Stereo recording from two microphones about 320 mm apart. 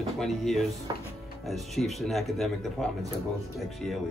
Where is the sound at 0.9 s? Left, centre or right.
Centre.